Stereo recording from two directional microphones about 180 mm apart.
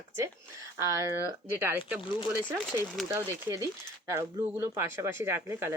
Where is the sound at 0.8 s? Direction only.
15° right (ahead or behind).